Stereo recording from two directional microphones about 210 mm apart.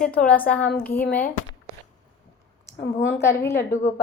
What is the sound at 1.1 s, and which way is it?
Speech, 45° left (ahead or behind).